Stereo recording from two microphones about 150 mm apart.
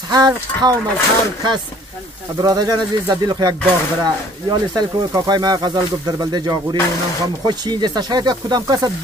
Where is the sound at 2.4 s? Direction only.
25° right (ahead or behind).